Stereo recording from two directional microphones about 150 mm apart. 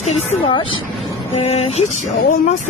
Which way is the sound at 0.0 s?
45° left (ahead or behind).